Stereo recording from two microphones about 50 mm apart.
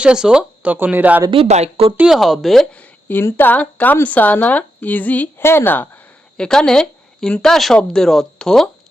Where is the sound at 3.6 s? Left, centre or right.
Left.